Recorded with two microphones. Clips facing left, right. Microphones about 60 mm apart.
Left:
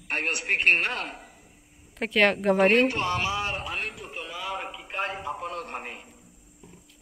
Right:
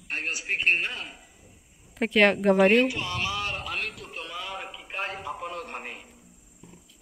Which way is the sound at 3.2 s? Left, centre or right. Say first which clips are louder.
Left 2 dB; left.